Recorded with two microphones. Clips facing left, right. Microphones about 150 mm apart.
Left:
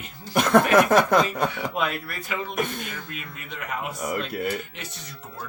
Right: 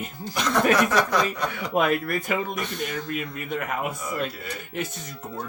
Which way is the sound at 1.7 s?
50° right (ahead or behind).